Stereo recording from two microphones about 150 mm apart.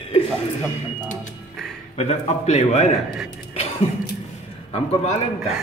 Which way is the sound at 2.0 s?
45° left (ahead or behind).